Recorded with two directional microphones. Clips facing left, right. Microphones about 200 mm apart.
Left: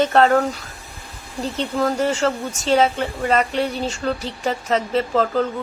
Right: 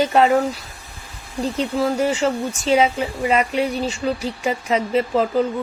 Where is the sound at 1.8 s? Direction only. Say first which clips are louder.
Even; 5° right (ahead or behind).